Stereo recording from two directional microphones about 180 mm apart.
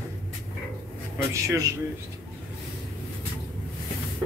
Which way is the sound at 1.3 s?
15° right (ahead or behind).